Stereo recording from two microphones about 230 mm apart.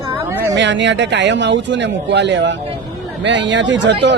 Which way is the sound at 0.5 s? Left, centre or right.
Right.